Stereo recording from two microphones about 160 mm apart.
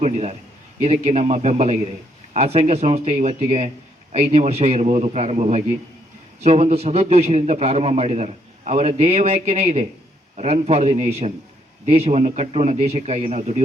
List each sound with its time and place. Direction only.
0.0 s a man's voice: 45° right (ahead or behind)